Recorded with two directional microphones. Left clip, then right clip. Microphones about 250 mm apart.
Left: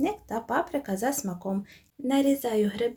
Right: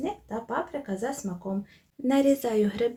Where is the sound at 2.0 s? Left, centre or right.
Centre.